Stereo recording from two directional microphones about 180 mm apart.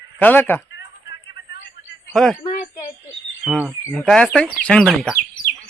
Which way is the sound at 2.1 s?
5° left (ahead or behind).